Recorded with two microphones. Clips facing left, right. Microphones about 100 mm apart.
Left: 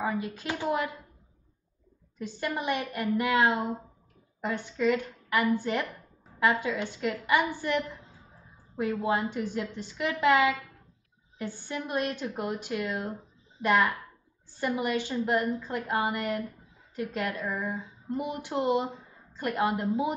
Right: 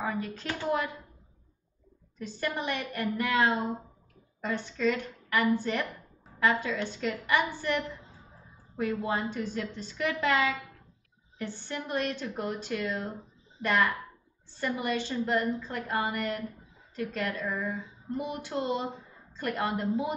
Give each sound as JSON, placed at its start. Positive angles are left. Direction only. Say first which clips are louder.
{"t": 0.0, "sound": "speech", "louder": "left 2 dB", "side_deg": 15}
{"t": 2.1, "sound": "speech", "louder": "left 1 dB", "side_deg": 15}